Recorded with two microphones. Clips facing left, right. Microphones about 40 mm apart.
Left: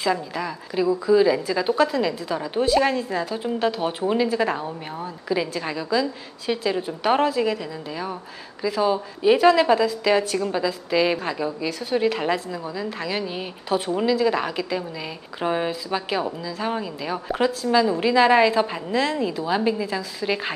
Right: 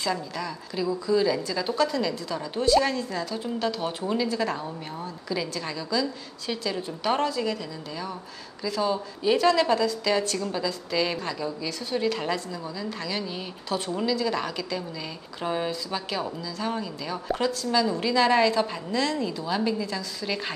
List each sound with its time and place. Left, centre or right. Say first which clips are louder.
0.0 s a woman's voice: left 5 dB; centre